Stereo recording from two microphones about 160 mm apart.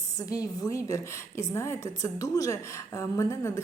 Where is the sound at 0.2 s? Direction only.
20° left (ahead or behind).